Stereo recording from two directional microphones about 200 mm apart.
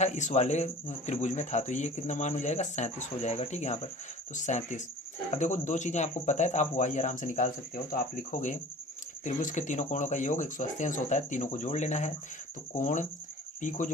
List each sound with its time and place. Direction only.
0.0 s speech: 35° left (ahead or behind)